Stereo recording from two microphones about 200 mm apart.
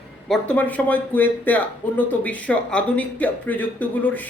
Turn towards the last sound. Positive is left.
turn(degrees=10)  # may be behind; listen again after turning